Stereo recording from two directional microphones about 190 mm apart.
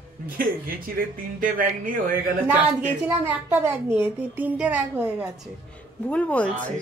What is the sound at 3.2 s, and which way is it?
A woman's voice, 10° right (ahead or behind).